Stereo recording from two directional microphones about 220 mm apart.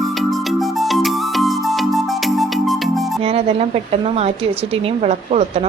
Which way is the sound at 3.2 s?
25° right (ahead or behind).